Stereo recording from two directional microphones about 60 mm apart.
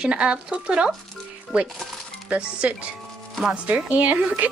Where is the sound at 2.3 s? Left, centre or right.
Centre.